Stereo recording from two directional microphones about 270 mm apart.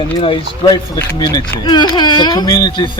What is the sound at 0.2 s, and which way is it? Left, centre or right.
Speech, centre.